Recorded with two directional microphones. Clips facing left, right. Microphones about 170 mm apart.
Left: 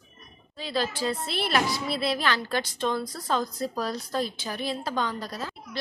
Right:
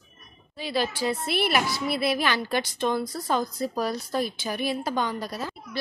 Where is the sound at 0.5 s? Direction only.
10° right (ahead or behind).